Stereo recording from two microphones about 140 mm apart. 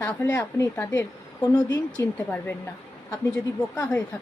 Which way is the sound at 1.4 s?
30° left (ahead or behind).